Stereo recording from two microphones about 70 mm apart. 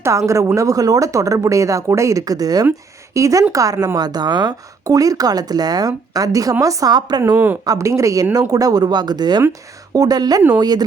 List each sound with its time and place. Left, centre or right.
0.0 s speech: right
3.2 s a woman's voice: right
4.9 s speech: right
7.3 s speech: right
7.8 s speech: right
9.5 s a woman's voice: right